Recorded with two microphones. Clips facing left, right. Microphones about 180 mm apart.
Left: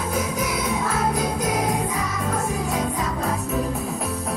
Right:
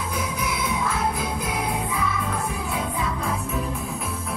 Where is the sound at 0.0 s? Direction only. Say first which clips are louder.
Left 4 dB; 45° left (ahead or behind).